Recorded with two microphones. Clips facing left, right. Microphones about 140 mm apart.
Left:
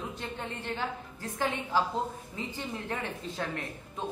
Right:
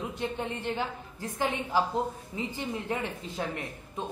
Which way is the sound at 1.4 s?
20° right (ahead or behind).